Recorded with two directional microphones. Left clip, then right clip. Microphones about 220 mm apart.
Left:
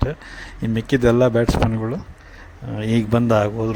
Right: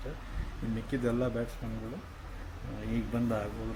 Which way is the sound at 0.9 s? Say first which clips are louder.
Left 17 dB; 40° left (ahead or behind).